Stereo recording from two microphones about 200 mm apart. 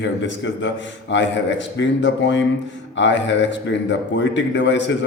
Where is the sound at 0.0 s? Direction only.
65° left (ahead or behind).